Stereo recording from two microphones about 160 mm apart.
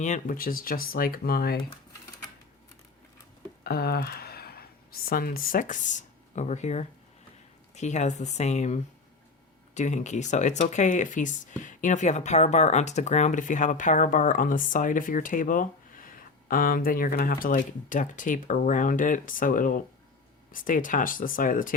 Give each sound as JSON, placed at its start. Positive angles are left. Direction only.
{"t": 0.0, "sound": "speech", "side_deg": 55}
{"t": 3.6, "sound": "speech", "side_deg": 75}